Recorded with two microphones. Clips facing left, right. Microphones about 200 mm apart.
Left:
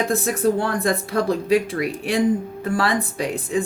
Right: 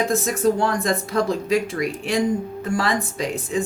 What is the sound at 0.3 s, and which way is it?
Speech, 55° left (ahead or behind).